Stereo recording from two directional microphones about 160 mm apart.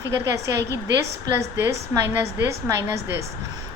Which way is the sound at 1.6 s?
15° right (ahead or behind).